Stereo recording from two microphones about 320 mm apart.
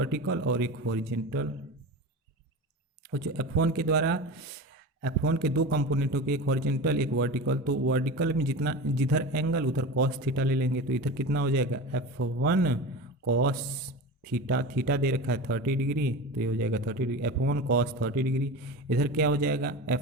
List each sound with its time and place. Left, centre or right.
0.0 s a man's voice: right
3.1 s a man's voice: right
14.3 s a man's voice: right